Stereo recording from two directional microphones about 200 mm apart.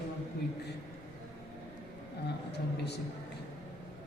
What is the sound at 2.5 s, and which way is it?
Speech, 55° left (ahead or behind).